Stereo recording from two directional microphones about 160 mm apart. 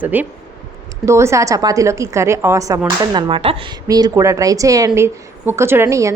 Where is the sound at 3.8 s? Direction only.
25° right (ahead or behind).